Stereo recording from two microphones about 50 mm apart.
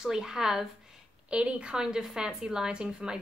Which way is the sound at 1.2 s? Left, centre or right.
Right.